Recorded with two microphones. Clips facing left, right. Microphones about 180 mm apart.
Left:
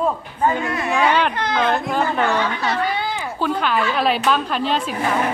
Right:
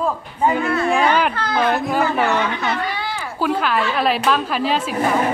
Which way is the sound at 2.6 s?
30° left (ahead or behind).